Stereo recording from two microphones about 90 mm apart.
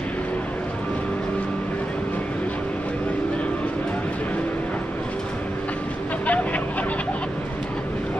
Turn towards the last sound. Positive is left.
turn(degrees=15)  # may be behind; listen again after turning